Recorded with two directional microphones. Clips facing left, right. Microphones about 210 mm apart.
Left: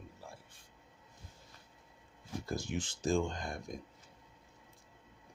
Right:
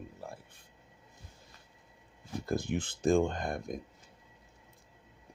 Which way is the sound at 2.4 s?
60° right (ahead or behind).